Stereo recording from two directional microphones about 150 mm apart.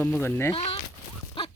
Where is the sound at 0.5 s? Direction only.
40° left (ahead or behind).